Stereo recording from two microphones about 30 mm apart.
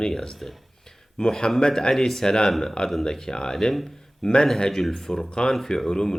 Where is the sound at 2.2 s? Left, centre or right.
Left.